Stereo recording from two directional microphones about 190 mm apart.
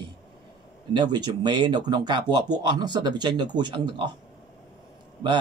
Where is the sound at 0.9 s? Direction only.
25° right (ahead or behind).